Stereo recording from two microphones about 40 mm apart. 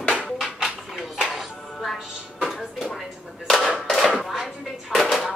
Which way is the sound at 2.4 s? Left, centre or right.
Centre.